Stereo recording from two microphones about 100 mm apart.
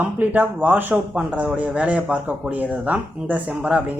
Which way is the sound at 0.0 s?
15° right (ahead or behind).